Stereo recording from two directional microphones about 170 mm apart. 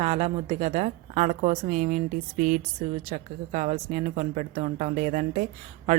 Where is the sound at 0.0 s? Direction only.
40° right (ahead or behind).